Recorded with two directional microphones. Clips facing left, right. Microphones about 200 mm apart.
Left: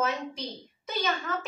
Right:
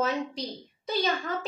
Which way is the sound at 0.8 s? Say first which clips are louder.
Right 3 dB; 30° right (ahead or behind).